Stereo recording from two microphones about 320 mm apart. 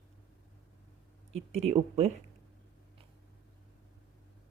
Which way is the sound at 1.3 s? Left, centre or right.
Centre.